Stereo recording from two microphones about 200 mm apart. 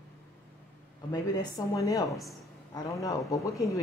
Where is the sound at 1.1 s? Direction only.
15° left (ahead or behind).